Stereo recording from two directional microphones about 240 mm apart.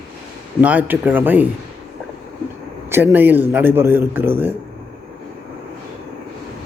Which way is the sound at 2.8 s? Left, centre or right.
Centre.